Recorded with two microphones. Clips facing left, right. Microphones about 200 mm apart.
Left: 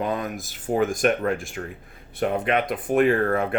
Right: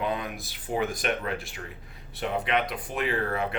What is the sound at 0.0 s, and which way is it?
Speech, 45° left (ahead or behind).